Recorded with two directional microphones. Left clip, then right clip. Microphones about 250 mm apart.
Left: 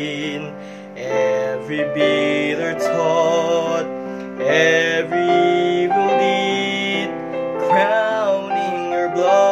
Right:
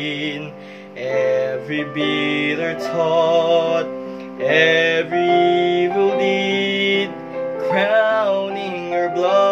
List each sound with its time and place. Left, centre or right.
1.0 s music: centre